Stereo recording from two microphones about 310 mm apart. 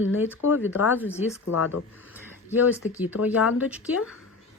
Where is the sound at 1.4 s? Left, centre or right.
Left.